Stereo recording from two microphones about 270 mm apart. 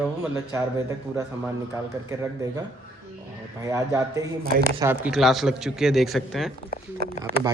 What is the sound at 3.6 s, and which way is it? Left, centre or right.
A man's voice, centre.